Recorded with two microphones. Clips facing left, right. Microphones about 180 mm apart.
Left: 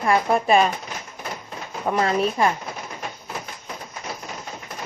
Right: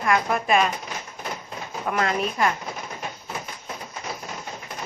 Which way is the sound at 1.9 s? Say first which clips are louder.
Left 4 dB; 30° left (ahead or behind).